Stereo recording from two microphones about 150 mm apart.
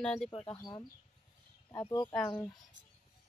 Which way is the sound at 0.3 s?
35° left (ahead or behind).